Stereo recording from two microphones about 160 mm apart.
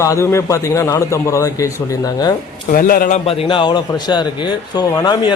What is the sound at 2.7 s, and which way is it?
Speech, 65° left (ahead or behind).